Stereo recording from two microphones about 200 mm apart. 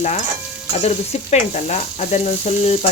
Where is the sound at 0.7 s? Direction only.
30° left (ahead or behind).